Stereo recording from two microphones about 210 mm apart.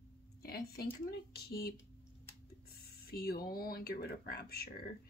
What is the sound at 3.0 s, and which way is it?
Speech, 45° left (ahead or behind).